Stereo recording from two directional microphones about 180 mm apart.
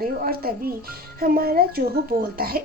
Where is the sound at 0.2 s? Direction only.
55° right (ahead or behind).